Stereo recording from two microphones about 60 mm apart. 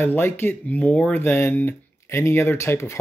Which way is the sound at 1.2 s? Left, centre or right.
Left.